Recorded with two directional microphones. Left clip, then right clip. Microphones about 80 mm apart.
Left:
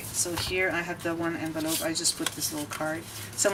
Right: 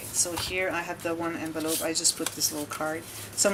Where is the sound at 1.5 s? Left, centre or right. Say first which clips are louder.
Even; centre.